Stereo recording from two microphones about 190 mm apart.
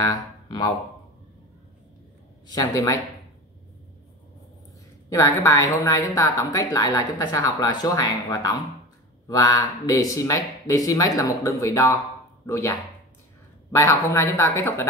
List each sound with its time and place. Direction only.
0.0 s speech: 20° left (ahead or behind)
2.5 s speech: 20° left (ahead or behind)
5.1 s a woman's voice: 15° left (ahead or behind)